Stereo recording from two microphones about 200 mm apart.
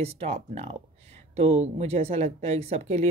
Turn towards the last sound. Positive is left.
turn(degrees=-30)  # may be behind; listen again after turning